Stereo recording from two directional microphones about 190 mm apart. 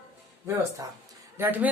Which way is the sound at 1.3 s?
10° right (ahead or behind).